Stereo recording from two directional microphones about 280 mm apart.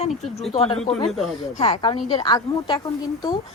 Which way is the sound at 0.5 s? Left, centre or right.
Left.